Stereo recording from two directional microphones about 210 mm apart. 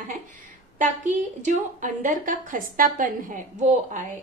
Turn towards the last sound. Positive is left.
turn(degrees=-35)  # may be behind; listen again after turning